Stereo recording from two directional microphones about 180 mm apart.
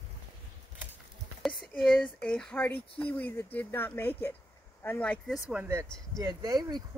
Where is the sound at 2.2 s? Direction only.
5° left (ahead or behind).